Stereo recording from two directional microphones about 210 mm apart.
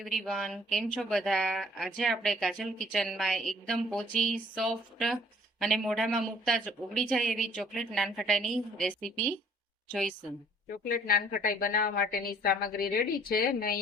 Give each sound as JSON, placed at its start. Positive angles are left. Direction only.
{"t": 0.0, "sound": "speech", "side_deg": 0}
{"t": 10.8, "sound": "a woman's voice", "side_deg": 45}